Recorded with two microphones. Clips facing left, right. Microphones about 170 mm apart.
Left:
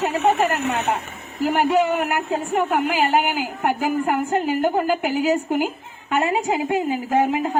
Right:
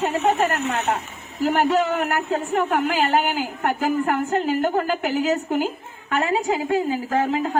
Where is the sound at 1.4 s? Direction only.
10° left (ahead or behind).